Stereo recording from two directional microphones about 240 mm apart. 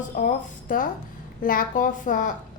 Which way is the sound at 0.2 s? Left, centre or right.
Left.